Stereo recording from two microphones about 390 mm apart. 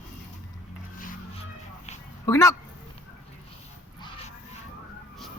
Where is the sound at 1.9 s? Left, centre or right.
Centre.